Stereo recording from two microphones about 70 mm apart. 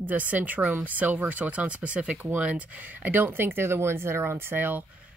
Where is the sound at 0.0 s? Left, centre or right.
Right.